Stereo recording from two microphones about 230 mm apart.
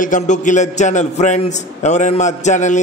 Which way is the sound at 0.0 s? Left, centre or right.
Left.